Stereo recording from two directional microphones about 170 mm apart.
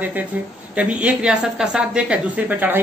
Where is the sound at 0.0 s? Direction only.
10° right (ahead or behind).